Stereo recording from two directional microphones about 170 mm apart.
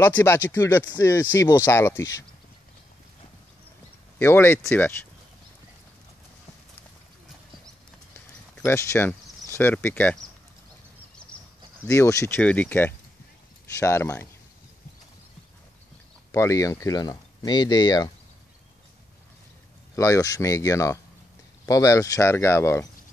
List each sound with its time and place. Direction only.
0.0 s speech: 15° left (ahead or behind)
4.2 s speech: 15° left (ahead or behind)
8.6 s speech: 15° left (ahead or behind)
11.8 s speech: 15° left (ahead or behind)
16.3 s speech: 20° left (ahead or behind)
20.0 s speech: 20° left (ahead or behind)